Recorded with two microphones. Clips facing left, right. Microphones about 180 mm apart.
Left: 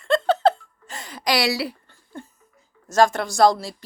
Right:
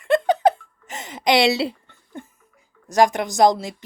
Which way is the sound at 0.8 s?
20° right (ahead or behind).